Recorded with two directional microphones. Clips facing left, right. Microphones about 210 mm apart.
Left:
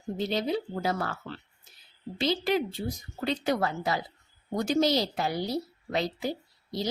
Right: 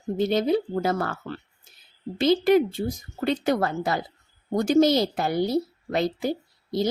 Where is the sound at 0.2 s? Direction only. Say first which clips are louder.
Right 7 dB; 50° right (ahead or behind).